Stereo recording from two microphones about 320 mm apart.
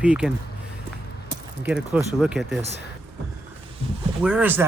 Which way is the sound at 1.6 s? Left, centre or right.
Centre.